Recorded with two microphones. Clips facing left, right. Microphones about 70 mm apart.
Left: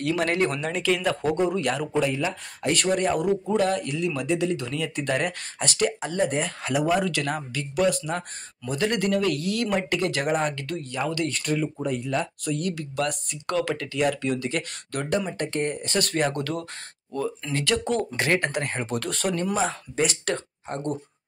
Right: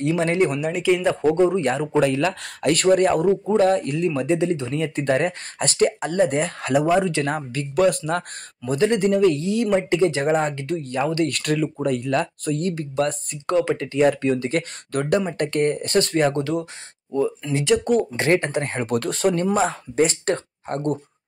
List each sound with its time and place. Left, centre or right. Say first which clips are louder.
0.0 s speech: right 4 dB; right
2.0 s speech: right 8 dB; right
2.7 s speech: right 6 dB; right
3.3 s speech: right 5 dB; right
6.9 s speech: right 4 dB; right
8.7 s speech: right 5 dB; right
10.8 s speech: right 6 dB; right
11.2 s speech: right 4 dB; right
12.4 s speech: right 4 dB; right
16.3 s speech: right 6 dB; centre
18.1 s speech: right 4 dB; right
18.7 s speech: right 5 dB; right